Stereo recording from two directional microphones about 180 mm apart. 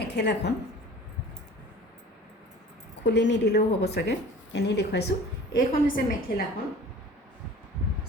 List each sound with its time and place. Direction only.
0.0 s a woman's voice: 70° left (ahead or behind)
3.0 s a woman's voice: 85° left; by 5.1 s 65° left (ahead or behind)
5.5 s a woman's voice: 50° left (ahead or behind)